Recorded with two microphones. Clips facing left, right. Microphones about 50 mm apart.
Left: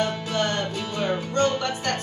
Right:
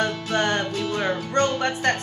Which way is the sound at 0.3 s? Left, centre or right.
Right.